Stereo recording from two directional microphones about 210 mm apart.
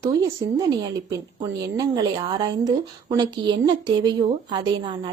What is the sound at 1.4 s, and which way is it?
Speech, 15° right (ahead or behind).